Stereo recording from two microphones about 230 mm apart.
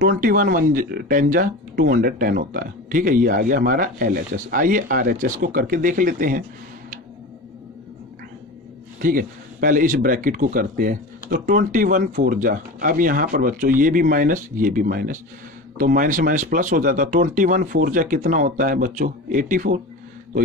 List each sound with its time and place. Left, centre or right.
0.0 s speech: right
9.0 s speech: right